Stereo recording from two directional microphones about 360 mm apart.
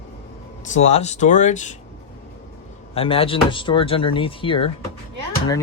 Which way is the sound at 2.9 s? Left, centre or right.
Centre.